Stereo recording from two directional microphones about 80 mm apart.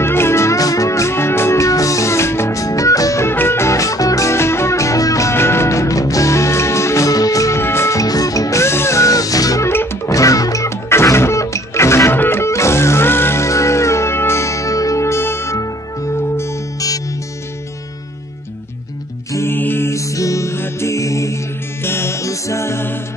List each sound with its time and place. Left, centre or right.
0.0 s music: left
3.3 s music: left
7.6 s music: left
19.3 s music: left